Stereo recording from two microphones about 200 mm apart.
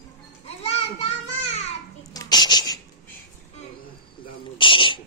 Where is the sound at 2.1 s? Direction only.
20° left (ahead or behind).